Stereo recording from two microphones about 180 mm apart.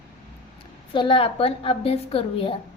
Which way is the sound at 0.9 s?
25° left (ahead or behind).